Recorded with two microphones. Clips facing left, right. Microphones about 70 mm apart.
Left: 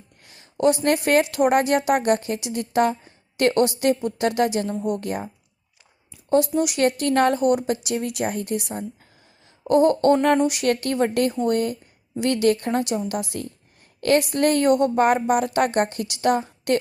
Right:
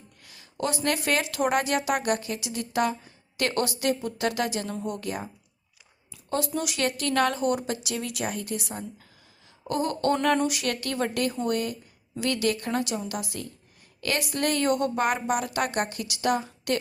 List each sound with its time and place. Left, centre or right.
0.3 s a woman's voice: left
6.5 s a woman's voice: left